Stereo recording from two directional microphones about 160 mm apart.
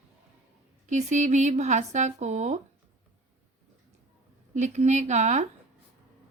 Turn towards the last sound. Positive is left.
turn(degrees=-45)  # may be behind; listen again after turning